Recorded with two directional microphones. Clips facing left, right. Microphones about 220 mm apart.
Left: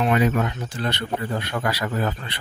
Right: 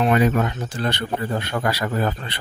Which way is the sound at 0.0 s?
40° right (ahead or behind).